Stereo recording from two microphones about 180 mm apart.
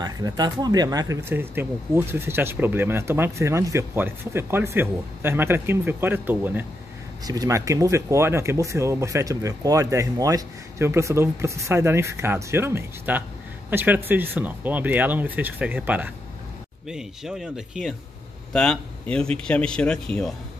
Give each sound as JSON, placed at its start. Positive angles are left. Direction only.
{"t": 0.0, "sound": "speech", "side_deg": -20}